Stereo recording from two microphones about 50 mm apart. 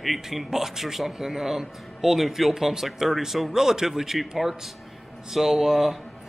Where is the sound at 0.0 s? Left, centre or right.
Centre.